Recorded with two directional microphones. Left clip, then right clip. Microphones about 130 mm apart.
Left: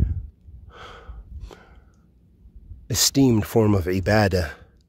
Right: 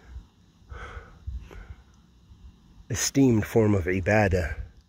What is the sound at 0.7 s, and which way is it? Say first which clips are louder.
Snort: left 1 dB; 15° left (ahead or behind).